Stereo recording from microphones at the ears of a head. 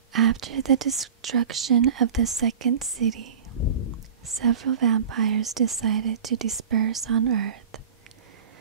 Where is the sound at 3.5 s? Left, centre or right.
Left.